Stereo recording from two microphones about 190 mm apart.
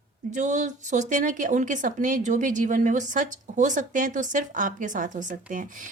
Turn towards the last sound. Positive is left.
turn(degrees=-40)  # may be behind; listen again after turning